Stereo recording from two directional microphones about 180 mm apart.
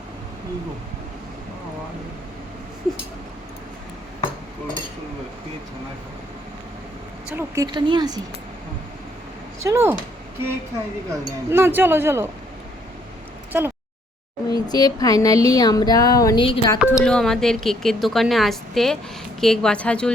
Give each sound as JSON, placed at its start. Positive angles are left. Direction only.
{"t": 7.3, "sound": "speech", "side_deg": -15}
{"t": 9.6, "sound": "speech", "side_deg": -15}
{"t": 11.1, "sound": "speech", "side_deg": -15}
{"t": 13.5, "sound": "a sound", "side_deg": -10}
{"t": 14.5, "sound": "speech", "side_deg": 20}
{"t": 16.7, "sound": "speech", "side_deg": -5}